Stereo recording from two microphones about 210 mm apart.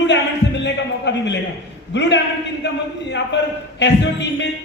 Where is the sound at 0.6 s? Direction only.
55° left (ahead or behind).